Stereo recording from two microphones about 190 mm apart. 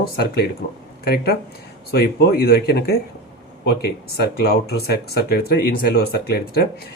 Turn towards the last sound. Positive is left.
turn(degrees=55)  # may be behind; listen again after turning